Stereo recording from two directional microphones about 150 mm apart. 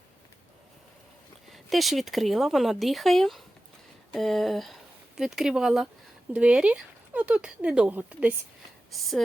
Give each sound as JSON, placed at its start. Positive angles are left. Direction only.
{"t": 1.5, "sound": "speech", "side_deg": 0}